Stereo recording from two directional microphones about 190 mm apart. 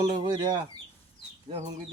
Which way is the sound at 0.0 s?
25° right (ahead or behind).